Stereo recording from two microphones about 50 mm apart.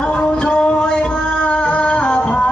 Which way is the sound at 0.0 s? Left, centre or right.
Left.